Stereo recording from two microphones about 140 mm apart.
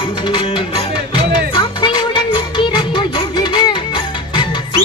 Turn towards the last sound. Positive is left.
turn(degrees=35)  # may be behind; listen again after turning